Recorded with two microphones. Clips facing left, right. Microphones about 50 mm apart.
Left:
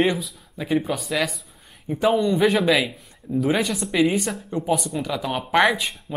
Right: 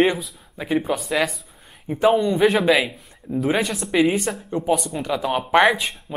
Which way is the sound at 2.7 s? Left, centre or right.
Centre.